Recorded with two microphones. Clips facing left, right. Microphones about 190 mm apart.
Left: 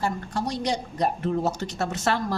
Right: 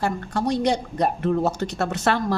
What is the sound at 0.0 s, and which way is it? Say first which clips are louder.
A woman's voice: right 3 dB; 60° right (ahead or behind).